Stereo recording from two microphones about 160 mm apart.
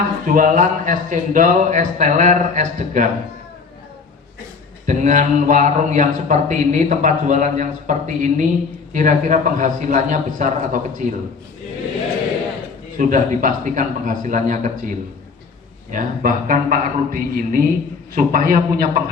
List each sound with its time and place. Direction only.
0.3 s a man's voice: 55° right (ahead or behind)
4.9 s a man's voice: 50° right (ahead or behind)
13.0 s a man's voice: 55° right (ahead or behind)